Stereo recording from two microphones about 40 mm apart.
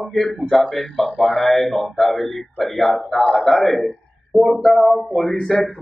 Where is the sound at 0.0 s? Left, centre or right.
Centre.